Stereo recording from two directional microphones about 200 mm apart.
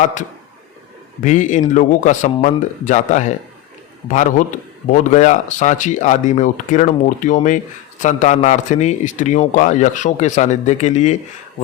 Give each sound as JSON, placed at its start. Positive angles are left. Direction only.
{"t": 1.2, "sound": "a man's voice", "side_deg": 40}